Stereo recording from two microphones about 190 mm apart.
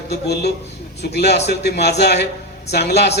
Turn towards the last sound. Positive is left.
turn(degrees=60)  # may be behind; listen again after turning